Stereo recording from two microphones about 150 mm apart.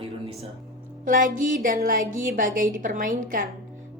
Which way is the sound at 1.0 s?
60° right (ahead or behind).